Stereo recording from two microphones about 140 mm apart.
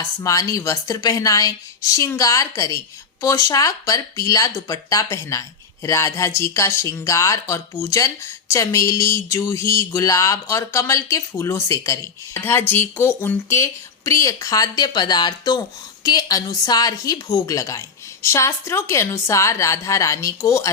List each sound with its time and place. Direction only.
0.0 s speech: 25° left (ahead or behind)